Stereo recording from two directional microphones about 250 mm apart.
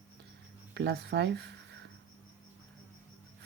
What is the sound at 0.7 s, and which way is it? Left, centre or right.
Speech, right.